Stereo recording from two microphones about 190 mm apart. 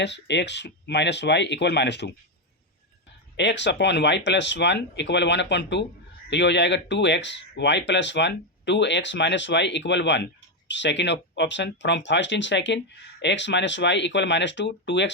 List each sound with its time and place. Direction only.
0.0 s speech: 65° left (ahead or behind)
3.3 s speech: 65° left (ahead or behind)